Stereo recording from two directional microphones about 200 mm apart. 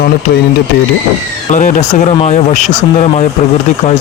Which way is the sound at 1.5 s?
35° left (ahead or behind).